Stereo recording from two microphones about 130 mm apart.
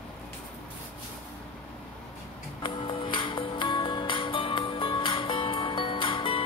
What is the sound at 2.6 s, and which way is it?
Music, 40° left (ahead or behind).